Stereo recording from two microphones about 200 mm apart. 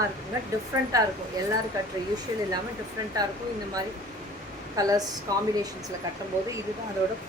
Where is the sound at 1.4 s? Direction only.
15° right (ahead or behind).